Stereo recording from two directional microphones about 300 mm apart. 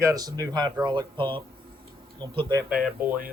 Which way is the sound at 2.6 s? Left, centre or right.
Centre.